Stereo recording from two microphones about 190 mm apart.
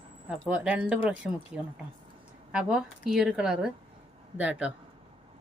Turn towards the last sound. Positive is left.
turn(degrees=-5)  # may be behind; listen again after turning